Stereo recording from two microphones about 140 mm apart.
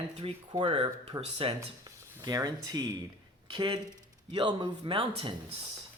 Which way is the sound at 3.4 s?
35° right (ahead or behind).